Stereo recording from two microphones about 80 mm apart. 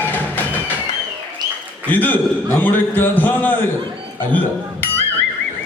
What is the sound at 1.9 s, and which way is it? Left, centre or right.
A man's voice, left.